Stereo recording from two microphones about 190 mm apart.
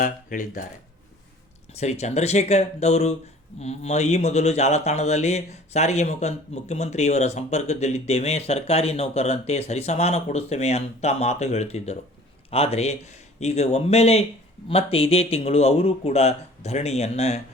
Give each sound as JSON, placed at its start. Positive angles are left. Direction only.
{"t": 0.0, "sound": "speech", "side_deg": 45}
{"t": 1.7, "sound": "speech", "side_deg": 35}